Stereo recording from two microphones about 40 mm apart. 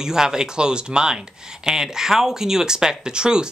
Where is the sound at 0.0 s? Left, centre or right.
Centre.